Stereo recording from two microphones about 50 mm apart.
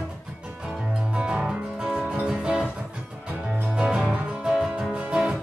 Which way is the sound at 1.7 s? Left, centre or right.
Centre.